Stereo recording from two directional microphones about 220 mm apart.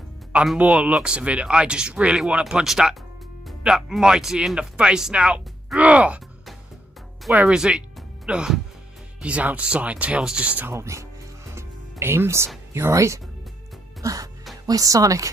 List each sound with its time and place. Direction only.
0.3 s speech: 5° right (ahead or behind)
11.5 s music: 10° right (ahead or behind)
12.7 s speech: 10° right (ahead or behind)
14.0 s music: 15° right (ahead or behind)
14.7 s speech: 15° right (ahead or behind)